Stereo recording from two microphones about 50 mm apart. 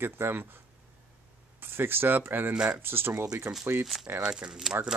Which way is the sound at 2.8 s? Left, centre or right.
Right.